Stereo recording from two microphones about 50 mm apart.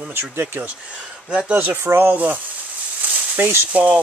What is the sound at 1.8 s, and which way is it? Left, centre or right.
Speech, right.